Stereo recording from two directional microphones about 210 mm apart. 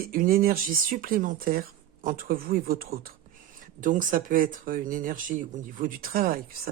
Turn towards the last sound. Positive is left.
turn(degrees=-45)  # may be behind; listen again after turning